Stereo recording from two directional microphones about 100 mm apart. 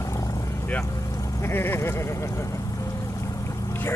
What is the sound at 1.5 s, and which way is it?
Speech, 25° left (ahead or behind).